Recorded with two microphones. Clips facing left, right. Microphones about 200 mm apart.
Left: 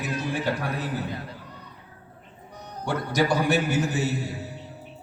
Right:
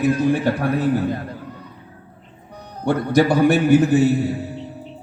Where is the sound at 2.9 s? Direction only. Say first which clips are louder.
Right 8 dB; 55° right (ahead or behind).